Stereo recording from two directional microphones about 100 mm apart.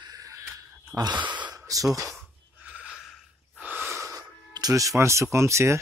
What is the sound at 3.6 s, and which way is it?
Gasp, 20° right (ahead or behind).